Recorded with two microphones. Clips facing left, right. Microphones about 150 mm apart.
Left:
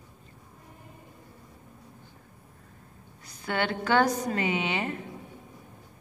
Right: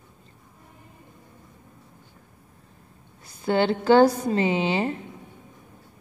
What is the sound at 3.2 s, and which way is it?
A woman's voice, 30° right (ahead or behind).